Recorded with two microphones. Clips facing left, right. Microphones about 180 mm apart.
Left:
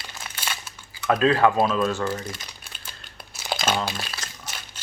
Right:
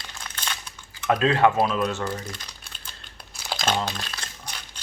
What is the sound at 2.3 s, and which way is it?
Crumpling, 5° left (ahead or behind).